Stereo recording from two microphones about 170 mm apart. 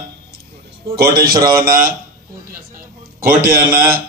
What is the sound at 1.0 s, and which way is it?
Speech, 60° right (ahead or behind).